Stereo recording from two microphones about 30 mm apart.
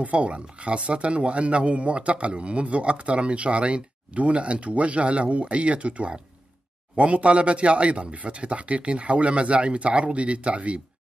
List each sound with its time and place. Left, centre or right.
0.0 s speech: right